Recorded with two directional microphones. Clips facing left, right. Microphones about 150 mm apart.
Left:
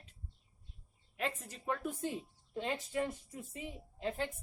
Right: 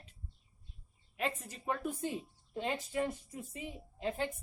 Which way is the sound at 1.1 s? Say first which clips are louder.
Right 2 dB; 10° right (ahead or behind).